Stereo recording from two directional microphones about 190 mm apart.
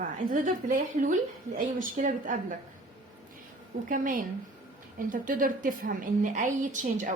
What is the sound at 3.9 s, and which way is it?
A woman's voice, 45° right (ahead or behind).